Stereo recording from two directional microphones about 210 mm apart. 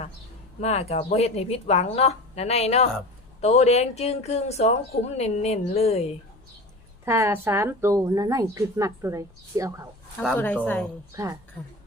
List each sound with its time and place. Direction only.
0.6 s speech: 30° left (ahead or behind)
7.0 s a woman's voice: 15° right (ahead or behind)
10.2 s speech: 10° left (ahead or behind)